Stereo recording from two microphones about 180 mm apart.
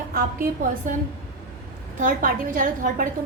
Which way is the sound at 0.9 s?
50° right (ahead or behind).